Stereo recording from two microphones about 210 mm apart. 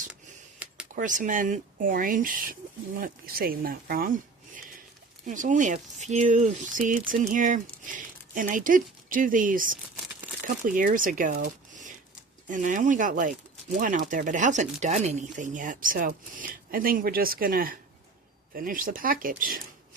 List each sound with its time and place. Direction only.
0.6 s a sound: 5° right (ahead or behind)
0.9 s speech: 40° right (ahead or behind)
5.2 s speech: 35° right (ahead or behind)
12.5 s speech: 40° right (ahead or behind)